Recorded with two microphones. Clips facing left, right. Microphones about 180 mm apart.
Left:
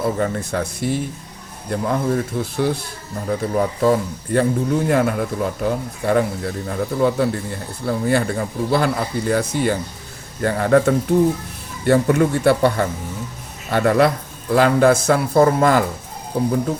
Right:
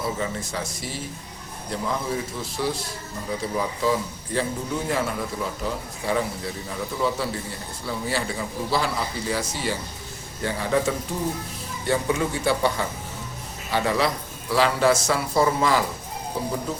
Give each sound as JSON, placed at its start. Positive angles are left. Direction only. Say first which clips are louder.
{"t": 0.0, "sound": "a man's voice", "louder": "left 7 dB", "side_deg": 55}